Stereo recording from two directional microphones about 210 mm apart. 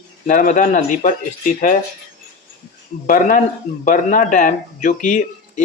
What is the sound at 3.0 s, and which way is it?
Speech, 40° left (ahead or behind).